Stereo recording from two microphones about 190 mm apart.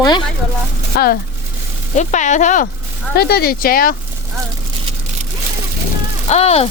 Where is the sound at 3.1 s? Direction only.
55° left (ahead or behind).